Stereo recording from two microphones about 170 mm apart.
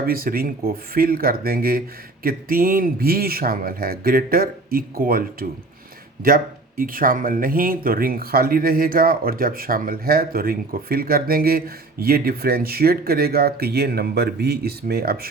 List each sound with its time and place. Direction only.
0.0 s speech: 60° right (ahead or behind)